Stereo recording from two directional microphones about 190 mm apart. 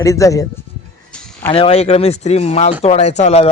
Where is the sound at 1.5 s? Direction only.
30° left (ahead or behind).